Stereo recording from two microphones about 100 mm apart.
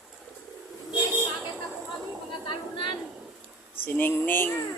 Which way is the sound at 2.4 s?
50° left (ahead or behind).